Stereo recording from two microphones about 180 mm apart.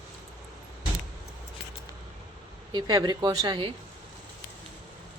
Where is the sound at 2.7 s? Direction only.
25° right (ahead or behind).